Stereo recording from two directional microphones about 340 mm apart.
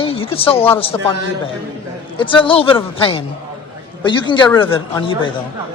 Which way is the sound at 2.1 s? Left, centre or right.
Centre.